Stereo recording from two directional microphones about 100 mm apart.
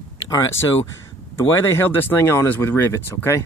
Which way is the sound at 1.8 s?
20° left (ahead or behind).